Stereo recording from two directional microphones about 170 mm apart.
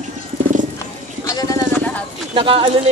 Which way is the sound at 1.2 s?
20° left (ahead or behind).